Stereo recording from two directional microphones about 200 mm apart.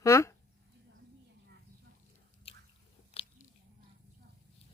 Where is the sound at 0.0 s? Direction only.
15° left (ahead or behind).